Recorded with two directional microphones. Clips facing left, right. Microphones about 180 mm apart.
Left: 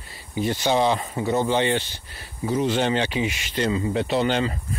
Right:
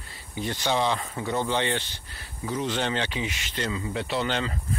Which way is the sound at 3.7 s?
25° left (ahead or behind).